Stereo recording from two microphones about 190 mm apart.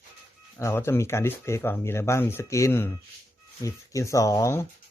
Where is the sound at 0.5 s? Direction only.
15° left (ahead or behind).